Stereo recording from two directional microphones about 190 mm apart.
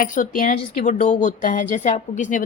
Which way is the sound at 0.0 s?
45° left (ahead or behind).